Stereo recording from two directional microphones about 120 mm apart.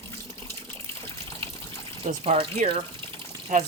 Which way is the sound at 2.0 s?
55° right (ahead or behind).